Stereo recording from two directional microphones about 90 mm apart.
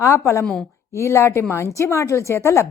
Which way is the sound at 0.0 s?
35° left (ahead or behind).